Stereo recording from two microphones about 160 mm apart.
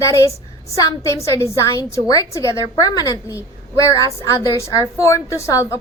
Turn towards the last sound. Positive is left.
turn(degrees=20)  # may be behind; listen again after turning